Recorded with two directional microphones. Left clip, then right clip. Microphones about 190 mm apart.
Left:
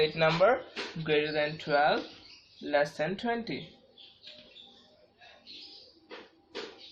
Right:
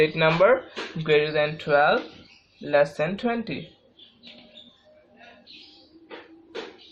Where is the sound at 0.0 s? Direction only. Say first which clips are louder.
Right 6 dB; 45° right (ahead or behind).